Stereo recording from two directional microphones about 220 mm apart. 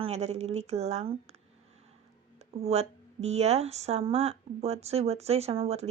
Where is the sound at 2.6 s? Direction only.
30° right (ahead or behind).